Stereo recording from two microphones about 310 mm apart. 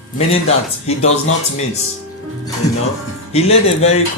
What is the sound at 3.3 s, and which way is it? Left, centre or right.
Speech, centre.